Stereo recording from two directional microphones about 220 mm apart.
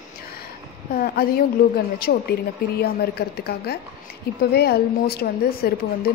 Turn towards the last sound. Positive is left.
turn(degrees=45)  # may be behind; listen again after turning